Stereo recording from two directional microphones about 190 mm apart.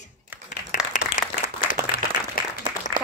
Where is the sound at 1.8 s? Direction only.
20° right (ahead or behind).